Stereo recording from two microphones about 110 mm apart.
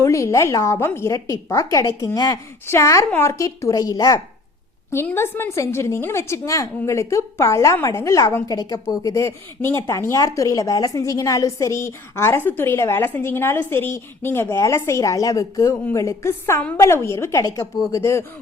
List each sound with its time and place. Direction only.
0.0 s a woman's voice: 25° left (ahead or behind)
4.9 s speech: 20° left (ahead or behind)